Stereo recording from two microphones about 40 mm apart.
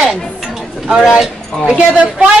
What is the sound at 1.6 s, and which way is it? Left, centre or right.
Speech, right.